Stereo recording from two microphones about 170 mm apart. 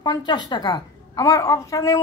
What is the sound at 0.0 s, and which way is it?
Speech, 25° left (ahead or behind).